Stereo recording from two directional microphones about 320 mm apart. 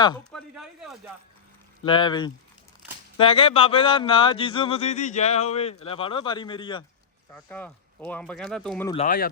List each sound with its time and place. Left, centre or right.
0.3 s speech: centre
1.8 s a man's voice: centre
8.9 s speech: left